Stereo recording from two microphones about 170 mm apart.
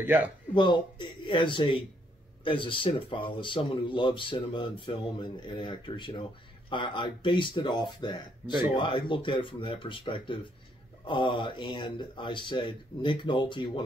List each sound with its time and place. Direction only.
0.0 s speech: 10° right (ahead or behind)
0.6 s speech: 25° left (ahead or behind)
8.4 s speech: 15° right (ahead or behind)
8.7 s speech: 30° left (ahead or behind)